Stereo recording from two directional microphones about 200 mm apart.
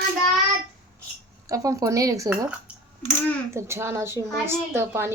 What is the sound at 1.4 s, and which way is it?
A woman's voice, 15° right (ahead or behind).